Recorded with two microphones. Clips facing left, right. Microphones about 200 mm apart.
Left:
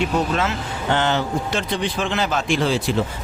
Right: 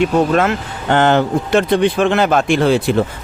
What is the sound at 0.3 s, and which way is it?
Speech, 55° right (ahead or behind).